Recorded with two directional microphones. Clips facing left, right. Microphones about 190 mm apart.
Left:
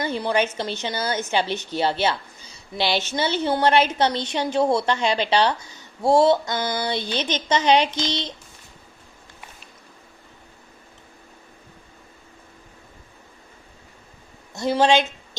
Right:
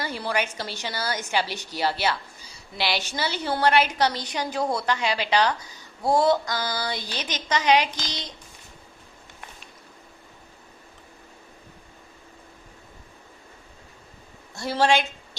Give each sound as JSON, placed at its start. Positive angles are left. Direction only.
{"t": 0.0, "sound": "a woman's voice", "side_deg": 20}
{"t": 14.5, "sound": "a woman's voice", "side_deg": 20}